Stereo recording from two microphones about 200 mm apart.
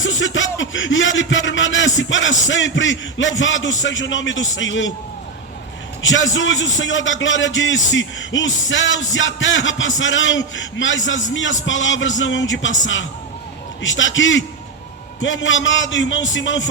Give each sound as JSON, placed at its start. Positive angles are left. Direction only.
{"t": 0.0, "sound": "a man's voice", "side_deg": 70}
{"t": 6.0, "sound": "a man's voice", "side_deg": 70}